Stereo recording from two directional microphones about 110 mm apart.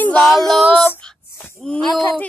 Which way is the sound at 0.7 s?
20° left (ahead or behind).